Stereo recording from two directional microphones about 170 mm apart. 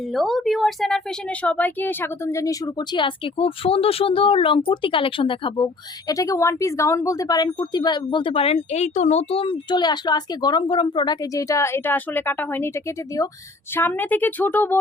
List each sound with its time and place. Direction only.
0.1 s a woman's voice: centre (ahead or behind)
13.7 s speech: 10° left (ahead or behind)